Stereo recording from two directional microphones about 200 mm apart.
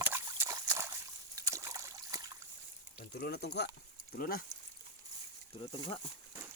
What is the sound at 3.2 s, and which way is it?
Speech, 55° left (ahead or behind).